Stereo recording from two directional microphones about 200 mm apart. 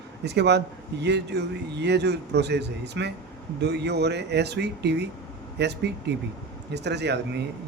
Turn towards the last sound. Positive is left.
turn(degrees=-55)  # may be behind; listen again after turning